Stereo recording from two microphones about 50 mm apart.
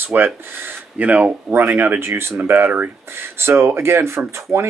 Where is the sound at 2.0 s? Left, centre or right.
Right.